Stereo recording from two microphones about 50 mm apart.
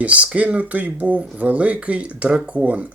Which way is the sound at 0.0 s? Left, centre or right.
Right.